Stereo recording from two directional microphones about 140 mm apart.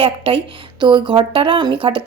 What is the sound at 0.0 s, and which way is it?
A woman's voice, 35° right (ahead or behind).